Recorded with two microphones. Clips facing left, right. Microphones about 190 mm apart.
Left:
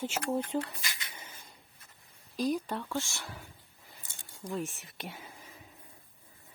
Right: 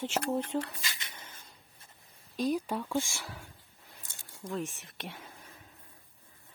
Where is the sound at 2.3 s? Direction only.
Centre (ahead or behind).